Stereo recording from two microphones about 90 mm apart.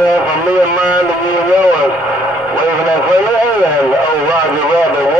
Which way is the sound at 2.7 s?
25° right (ahead or behind).